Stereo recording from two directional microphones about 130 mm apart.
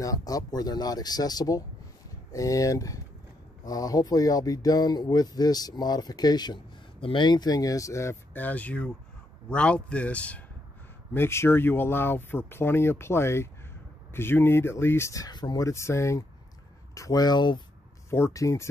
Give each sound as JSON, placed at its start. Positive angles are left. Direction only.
{"t": 0.0, "sound": "speech", "side_deg": 25}
{"t": 18.1, "sound": "speech", "side_deg": 20}